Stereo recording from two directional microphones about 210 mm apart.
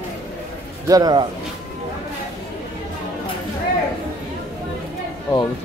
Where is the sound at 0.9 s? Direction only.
20° right (ahead or behind).